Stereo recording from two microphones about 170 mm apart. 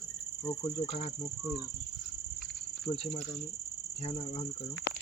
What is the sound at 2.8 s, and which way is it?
Cricket, 40° left (ahead or behind).